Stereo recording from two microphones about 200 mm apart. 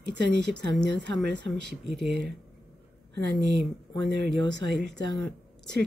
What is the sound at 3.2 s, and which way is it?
Speech, 60° right (ahead or behind).